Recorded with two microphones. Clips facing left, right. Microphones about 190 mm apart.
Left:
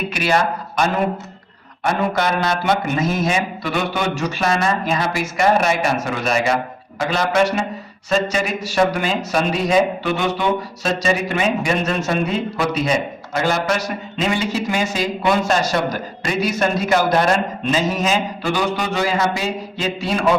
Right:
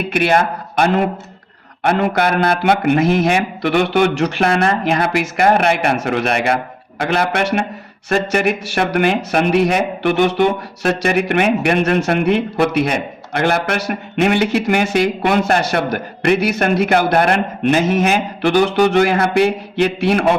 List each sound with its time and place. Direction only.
0.1 s a man's voice: 55° right (ahead or behind)